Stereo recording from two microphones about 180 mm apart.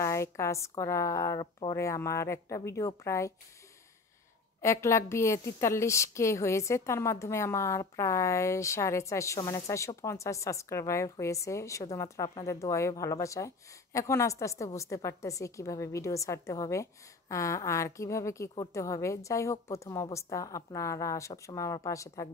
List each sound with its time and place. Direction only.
0.0 s a woman's voice: 15° left (ahead or behind)
4.6 s a woman's voice: 15° left (ahead or behind)